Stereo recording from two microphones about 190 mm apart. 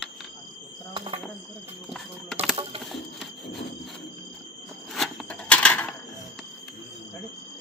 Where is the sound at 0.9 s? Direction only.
30° right (ahead or behind).